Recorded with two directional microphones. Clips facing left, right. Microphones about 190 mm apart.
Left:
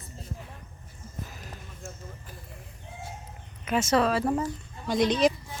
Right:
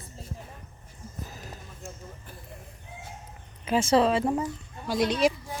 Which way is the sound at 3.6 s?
30° right (ahead or behind).